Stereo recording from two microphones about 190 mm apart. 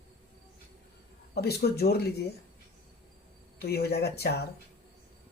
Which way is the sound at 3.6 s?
55° left (ahead or behind).